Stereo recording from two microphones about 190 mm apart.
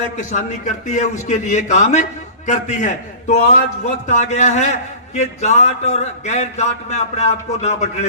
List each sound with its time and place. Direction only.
0.2 s a man's voice: 40° left (ahead or behind)